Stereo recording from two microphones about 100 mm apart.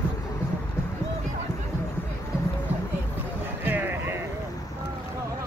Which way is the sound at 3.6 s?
20° right (ahead or behind).